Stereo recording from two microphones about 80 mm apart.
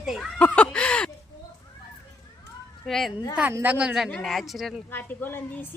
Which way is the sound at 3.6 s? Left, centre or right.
Centre.